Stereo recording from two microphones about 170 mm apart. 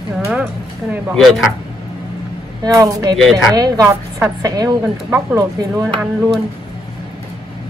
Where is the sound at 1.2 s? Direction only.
Centre (ahead or behind).